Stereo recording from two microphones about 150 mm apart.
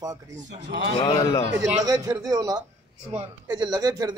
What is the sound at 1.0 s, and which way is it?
Speech, 25° left (ahead or behind).